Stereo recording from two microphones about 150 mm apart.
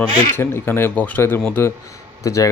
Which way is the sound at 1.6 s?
20° left (ahead or behind).